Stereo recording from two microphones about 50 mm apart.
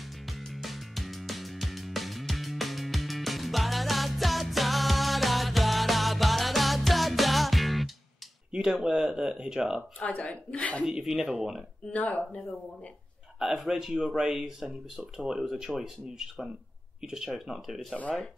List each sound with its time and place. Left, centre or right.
0.0 s music: centre
8.5 s speech: centre
9.8 s a woman's voice: left
10.9 s speech: centre
11.9 s speech: left
13.4 s a man's voice: centre